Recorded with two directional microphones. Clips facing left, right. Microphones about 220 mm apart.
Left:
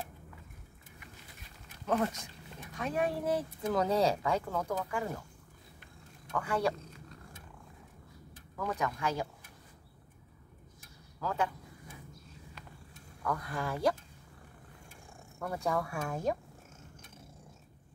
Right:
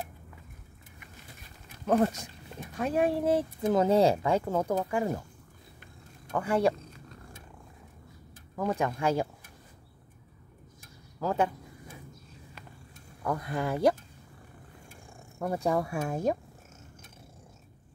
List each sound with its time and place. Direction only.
1.9 s speech: 35° right (ahead or behind)
6.3 s speech: 25° right (ahead or behind)
8.5 s speech: 30° right (ahead or behind)
11.1 s speech: 25° right (ahead or behind)
13.2 s speech: 25° right (ahead or behind)
15.3 s speech: 25° right (ahead or behind)